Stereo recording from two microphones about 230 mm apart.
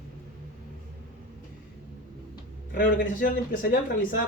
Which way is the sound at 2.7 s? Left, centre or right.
Left.